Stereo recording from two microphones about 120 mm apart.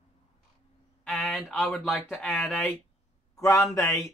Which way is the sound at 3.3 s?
20° left (ahead or behind).